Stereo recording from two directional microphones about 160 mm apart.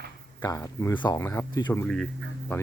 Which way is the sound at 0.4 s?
20° left (ahead or behind).